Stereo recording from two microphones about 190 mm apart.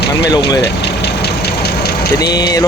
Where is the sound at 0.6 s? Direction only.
65° left (ahead or behind).